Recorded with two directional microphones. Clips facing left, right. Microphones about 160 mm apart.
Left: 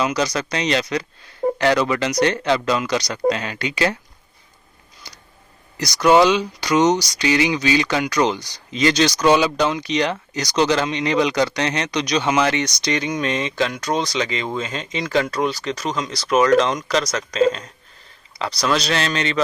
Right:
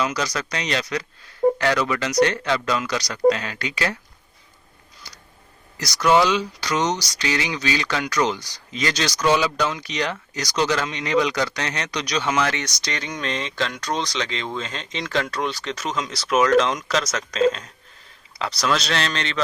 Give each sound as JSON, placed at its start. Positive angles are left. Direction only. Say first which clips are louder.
{"t": 0.0, "sound": "speech", "louder": "left 4 dB", "side_deg": 20}
{"t": 5.8, "sound": "speech", "louder": "left 4 dB", "side_deg": 20}